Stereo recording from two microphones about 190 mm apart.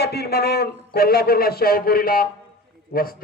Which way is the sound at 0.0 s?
55° left (ahead or behind).